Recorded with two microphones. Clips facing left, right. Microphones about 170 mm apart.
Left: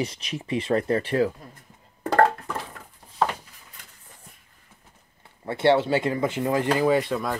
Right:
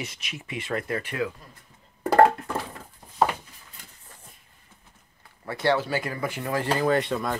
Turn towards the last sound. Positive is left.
turn(degrees=0)  # may be behind; listen again after turning